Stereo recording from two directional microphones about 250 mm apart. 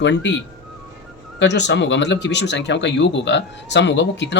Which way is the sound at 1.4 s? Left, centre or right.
Left.